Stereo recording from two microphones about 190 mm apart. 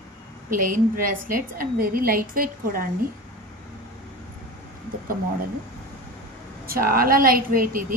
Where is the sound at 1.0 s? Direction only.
45° right (ahead or behind).